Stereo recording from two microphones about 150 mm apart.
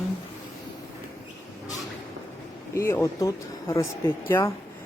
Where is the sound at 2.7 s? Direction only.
20° left (ahead or behind).